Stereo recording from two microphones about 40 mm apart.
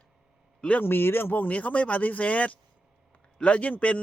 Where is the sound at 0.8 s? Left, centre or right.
Left.